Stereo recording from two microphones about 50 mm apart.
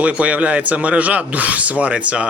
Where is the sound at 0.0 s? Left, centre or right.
Right.